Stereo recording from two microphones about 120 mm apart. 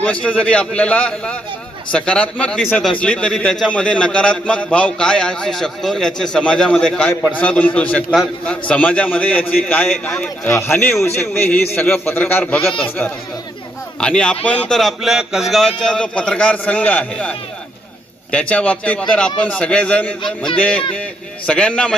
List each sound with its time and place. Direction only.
0.0 s a man's voice: 10° left (ahead or behind)
9.9 s a man's voice: 5° left (ahead or behind)
10.4 s a man's voice: 20° left (ahead or behind)
14.0 s a man's voice: 10° left (ahead or behind)